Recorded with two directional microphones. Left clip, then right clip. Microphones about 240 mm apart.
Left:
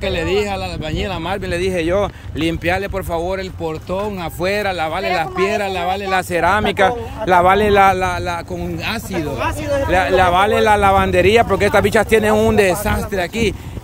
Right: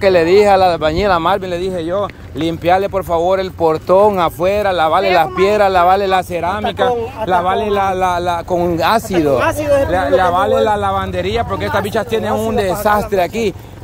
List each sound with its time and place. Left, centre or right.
0.0 s speech: centre
3.9 s speech: centre
4.4 s speech: centre
6.1 s a man's voice: centre
8.5 s speech: centre
9.9 s speech: left
10.3 s a man's voice: centre
12.8 s speech: centre